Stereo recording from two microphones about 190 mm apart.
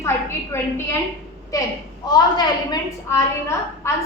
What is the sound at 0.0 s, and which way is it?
Speech, 15° left (ahead or behind).